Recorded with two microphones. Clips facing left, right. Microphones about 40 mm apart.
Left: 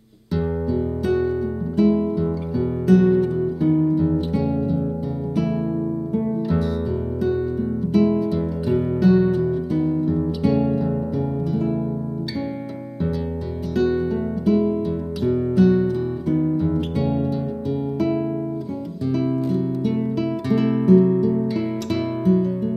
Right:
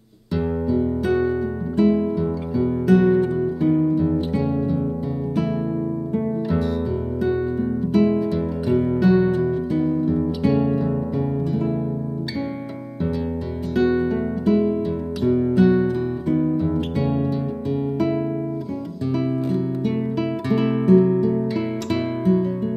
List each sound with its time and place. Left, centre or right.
0.4 s music: centre
3.1 s music: centre
6.1 s music: centre
7.9 s music: centre
13.7 s music: centre